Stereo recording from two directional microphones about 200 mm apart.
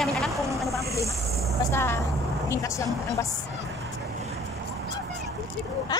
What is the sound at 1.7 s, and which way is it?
Speech, 15° left (ahead or behind).